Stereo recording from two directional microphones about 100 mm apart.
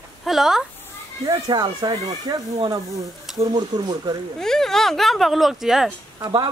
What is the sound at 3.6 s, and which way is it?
Speech, 50° right (ahead or behind).